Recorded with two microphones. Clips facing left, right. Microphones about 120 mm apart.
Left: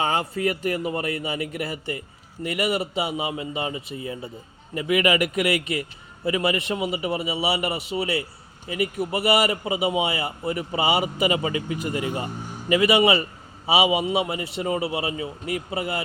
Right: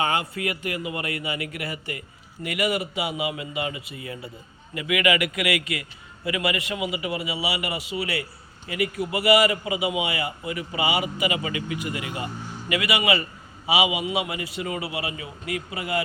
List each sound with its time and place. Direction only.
0.0 s a man's voice: 35° left (ahead or behind)
2.4 s a man's voice: 30° left (ahead or behind)